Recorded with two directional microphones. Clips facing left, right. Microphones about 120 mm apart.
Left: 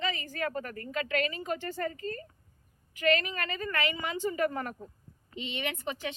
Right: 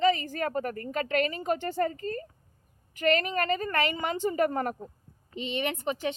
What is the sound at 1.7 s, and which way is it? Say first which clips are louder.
Speech: right 5 dB; 30° right (ahead or behind).